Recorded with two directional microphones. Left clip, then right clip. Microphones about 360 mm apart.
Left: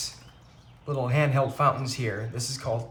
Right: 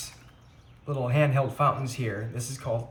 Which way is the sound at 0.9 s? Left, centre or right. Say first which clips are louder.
Even; centre.